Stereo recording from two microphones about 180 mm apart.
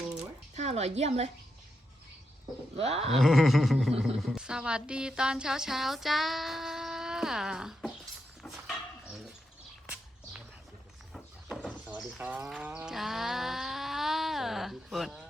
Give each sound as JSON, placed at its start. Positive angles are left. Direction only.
{"t": 0.5, "sound": "a woman's voice", "side_deg": -40}
{"t": 2.7, "sound": "sheep", "side_deg": -35}
{"t": 3.1, "sound": "a woman's voice", "side_deg": 0}
{"t": 8.4, "sound": "dishes", "side_deg": 0}
{"t": 9.8, "sound": "walk", "side_deg": -5}
{"t": 11.1, "sound": "livestock", "side_deg": 0}